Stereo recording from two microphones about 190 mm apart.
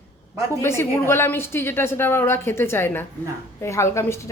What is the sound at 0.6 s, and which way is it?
A woman's voice, 15° left (ahead or behind).